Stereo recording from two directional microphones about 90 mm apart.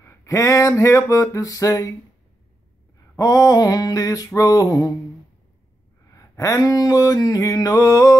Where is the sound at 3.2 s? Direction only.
45° left (ahead or behind).